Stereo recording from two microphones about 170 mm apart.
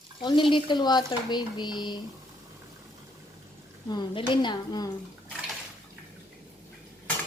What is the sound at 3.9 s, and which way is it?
Speech, 30° left (ahead or behind).